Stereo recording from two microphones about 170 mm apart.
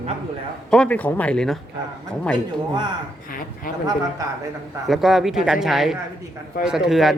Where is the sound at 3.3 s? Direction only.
55° left (ahead or behind).